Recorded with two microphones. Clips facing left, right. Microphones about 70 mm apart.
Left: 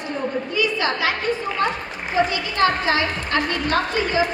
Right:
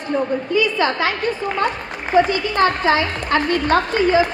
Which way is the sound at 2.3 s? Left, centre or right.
Right.